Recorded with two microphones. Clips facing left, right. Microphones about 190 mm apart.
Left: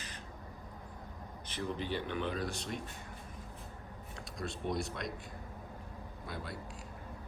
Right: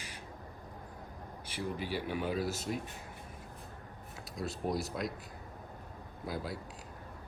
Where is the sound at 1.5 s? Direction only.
10° right (ahead or behind).